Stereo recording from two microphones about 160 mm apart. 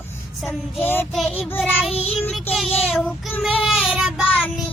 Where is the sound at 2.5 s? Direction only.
Centre (ahead or behind).